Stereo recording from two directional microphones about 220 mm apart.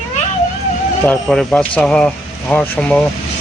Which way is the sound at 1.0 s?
5° left (ahead or behind).